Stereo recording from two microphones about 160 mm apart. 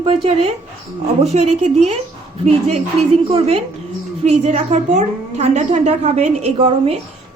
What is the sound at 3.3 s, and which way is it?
A woman's voice, 35° right (ahead or behind).